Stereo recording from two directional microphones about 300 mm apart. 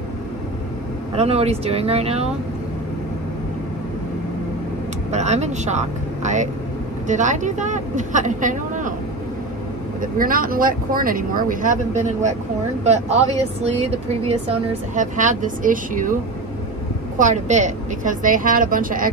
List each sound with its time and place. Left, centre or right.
1.1 s speech: right
5.1 s speech: right
10.1 s speech: right
17.2 s speech: right